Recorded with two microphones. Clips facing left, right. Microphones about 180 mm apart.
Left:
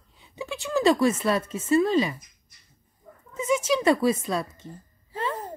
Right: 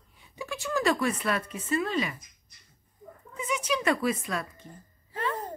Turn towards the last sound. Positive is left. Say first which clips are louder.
# left 2 dB
turn(degrees=30)  # may be behind; listen again after turning